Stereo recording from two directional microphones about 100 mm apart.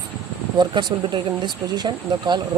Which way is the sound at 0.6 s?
50° right (ahead or behind).